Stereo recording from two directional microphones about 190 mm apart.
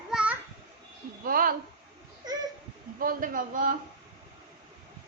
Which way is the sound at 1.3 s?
50° right (ahead or behind).